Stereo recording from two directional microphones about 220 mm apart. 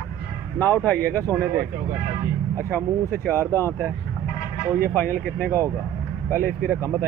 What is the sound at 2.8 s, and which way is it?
Speech, 10° left (ahead or behind).